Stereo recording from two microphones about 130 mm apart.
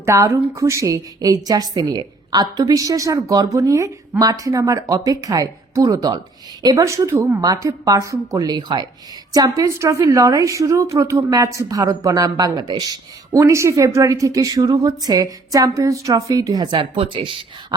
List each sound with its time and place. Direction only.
0.0 s a woman's voice: 20° right (ahead or behind)
16.7 s speech: 40° right (ahead or behind)